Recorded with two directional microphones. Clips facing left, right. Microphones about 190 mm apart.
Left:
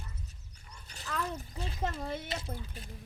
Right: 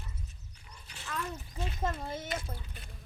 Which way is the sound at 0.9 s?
35° left (ahead or behind).